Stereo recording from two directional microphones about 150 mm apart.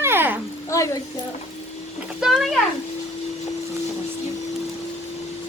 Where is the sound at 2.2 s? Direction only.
Centre (ahead or behind).